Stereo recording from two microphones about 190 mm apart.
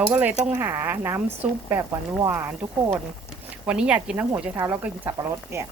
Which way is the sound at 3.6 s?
5° right (ahead or behind).